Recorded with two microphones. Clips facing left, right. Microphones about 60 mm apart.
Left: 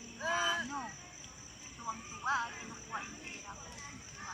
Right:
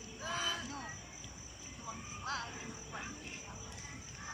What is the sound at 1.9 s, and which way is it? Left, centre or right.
Music, centre.